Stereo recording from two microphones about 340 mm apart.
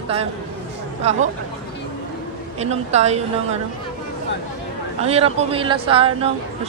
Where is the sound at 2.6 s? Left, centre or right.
Centre.